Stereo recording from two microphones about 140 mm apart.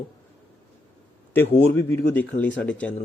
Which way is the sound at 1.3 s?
15° left (ahead or behind).